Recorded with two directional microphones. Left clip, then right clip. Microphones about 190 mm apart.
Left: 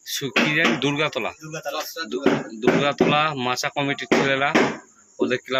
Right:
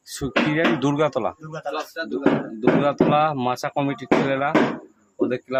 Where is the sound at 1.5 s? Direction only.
10° left (ahead or behind).